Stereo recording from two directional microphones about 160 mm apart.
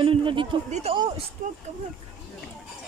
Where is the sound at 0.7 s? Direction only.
45° right (ahead or behind).